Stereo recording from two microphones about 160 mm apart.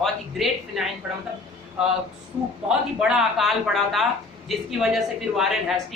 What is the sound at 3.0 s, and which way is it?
Speech, 5° right (ahead or behind).